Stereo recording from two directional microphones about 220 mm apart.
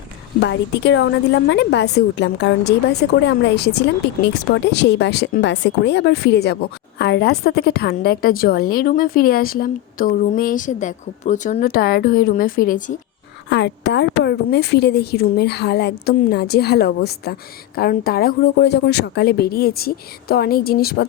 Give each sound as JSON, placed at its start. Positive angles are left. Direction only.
{"t": 0.4, "sound": "a woman's voice", "side_deg": 55}
{"t": 13.5, "sound": "a woman's voice", "side_deg": 50}